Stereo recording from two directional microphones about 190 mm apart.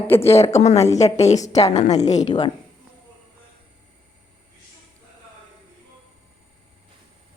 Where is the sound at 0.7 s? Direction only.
15° left (ahead or behind).